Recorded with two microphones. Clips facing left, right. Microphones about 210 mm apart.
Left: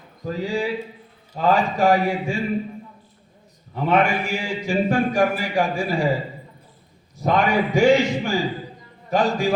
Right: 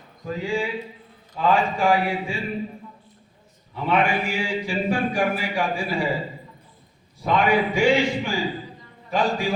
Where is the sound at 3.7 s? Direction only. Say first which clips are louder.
Left 2 dB; 45° left (ahead or behind).